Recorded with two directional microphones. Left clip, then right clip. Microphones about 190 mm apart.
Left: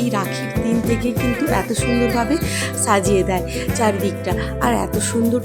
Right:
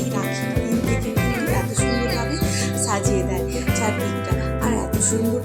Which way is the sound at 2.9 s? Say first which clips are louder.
Left 8 dB; 40° left (ahead or behind).